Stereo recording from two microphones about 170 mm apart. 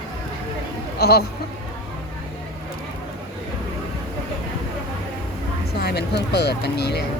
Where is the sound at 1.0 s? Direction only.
65° left (ahead or behind).